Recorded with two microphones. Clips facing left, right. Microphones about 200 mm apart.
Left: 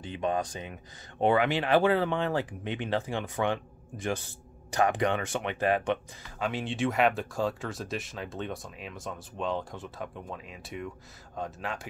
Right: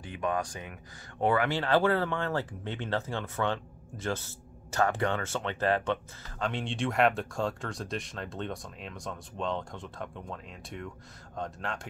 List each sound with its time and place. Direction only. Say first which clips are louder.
0.0 s speech: left 2 dB; 25° left (ahead or behind); by 11.9 s 5° left (ahead or behind)